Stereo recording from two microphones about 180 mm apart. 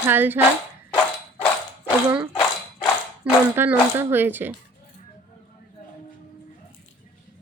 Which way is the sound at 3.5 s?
10° right (ahead or behind).